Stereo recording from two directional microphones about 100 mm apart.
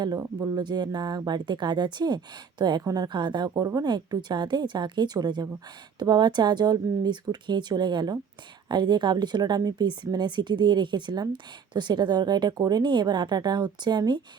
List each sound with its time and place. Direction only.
0.2 s speech: 30° right (ahead or behind)
0.6 s speech: 45° right (ahead or behind)